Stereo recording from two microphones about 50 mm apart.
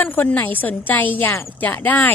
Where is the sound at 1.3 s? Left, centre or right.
Left.